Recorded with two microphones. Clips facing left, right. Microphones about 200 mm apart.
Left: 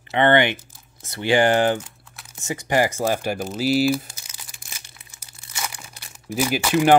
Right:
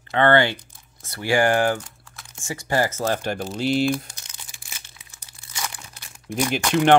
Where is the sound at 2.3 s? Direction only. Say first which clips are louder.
Left 2 dB; 20° left (ahead or behind).